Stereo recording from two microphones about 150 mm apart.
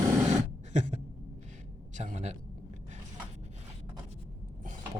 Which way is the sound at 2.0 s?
55° right (ahead or behind).